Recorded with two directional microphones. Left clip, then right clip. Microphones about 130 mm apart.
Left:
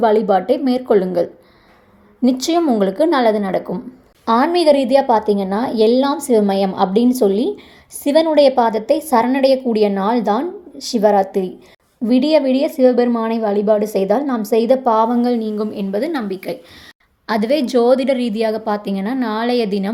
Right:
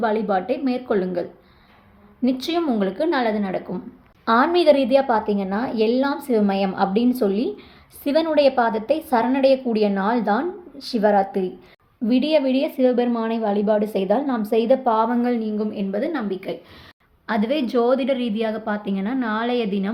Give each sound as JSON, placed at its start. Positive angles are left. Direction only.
{"t": 0.0, "sound": "a woman's voice", "side_deg": 35}